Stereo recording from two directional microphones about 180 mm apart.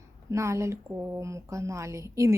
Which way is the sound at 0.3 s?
15° right (ahead or behind).